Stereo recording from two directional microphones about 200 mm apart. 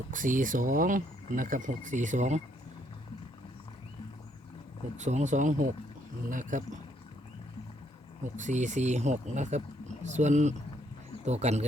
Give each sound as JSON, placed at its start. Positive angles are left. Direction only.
{"t": 0.1, "sound": "speech", "side_deg": -40}
{"t": 4.9, "sound": "speech", "side_deg": -35}
{"t": 8.4, "sound": "speech", "side_deg": -40}